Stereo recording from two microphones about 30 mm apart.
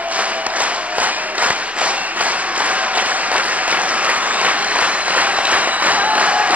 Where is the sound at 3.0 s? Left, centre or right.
Right.